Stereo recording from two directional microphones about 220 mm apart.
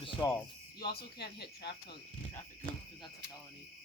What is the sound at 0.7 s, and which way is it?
Speech, 45° left (ahead or behind).